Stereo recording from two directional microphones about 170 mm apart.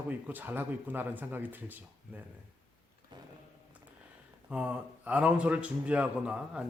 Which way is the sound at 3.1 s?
25° right (ahead or behind).